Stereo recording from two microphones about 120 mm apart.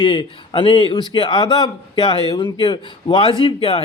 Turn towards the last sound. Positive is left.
turn(degrees=50)  # may be behind; listen again after turning